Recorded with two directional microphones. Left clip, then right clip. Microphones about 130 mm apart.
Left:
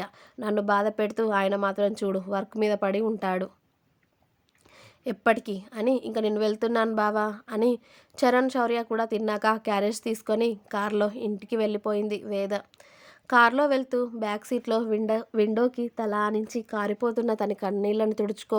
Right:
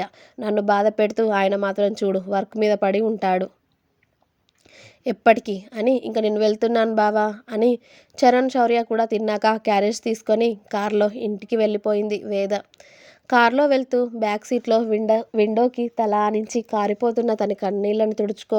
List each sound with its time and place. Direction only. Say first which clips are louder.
0.0 s a woman's voice: right 6 dB; 25° right (ahead or behind)
4.8 s a woman's voice: right 7 dB; 30° right (ahead or behind); by 18.5 s 10° right (ahead or behind)